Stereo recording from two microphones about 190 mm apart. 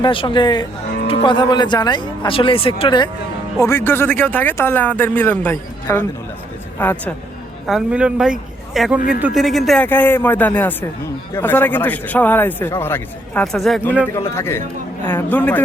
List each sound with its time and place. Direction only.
0.0 s speech: 25° left (ahead or behind)
3.6 s a man's voice: 15° left (ahead or behind)
7.7 s speech: 5° right (ahead or behind)
9.0 s a man's voice: 45° left (ahead or behind)
9.2 s a man's voice: centre (ahead or behind)
14.1 s a man's voice: 15° left (ahead or behind)